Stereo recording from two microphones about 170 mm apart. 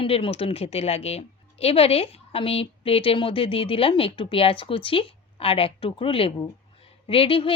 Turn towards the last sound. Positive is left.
turn(degrees=30)  # may be behind; listen again after turning